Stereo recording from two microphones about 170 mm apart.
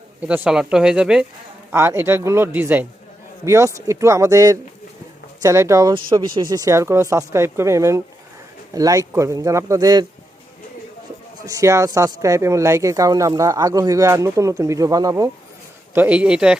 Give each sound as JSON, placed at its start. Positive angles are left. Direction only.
{"t": 0.2, "sound": "speech", "side_deg": -10}
{"t": 11.4, "sound": "speech", "side_deg": -15}
{"t": 16.0, "sound": "speech", "side_deg": -5}